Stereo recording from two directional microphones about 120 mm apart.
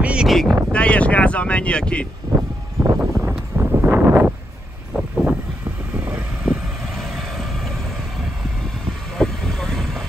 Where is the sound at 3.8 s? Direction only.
15° right (ahead or behind).